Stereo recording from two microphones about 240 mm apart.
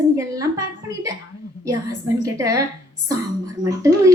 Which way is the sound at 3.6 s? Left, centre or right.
Centre.